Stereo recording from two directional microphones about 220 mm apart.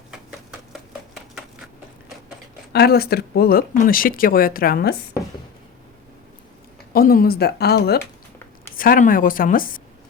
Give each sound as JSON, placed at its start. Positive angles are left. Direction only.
{"t": 0.1, "sound": "typewriter", "side_deg": 0}
{"t": 2.7, "sound": "speech", "side_deg": 45}
{"t": 6.9, "sound": "speech", "side_deg": 40}